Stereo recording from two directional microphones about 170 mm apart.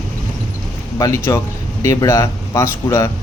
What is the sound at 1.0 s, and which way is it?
Speech, 15° left (ahead or behind).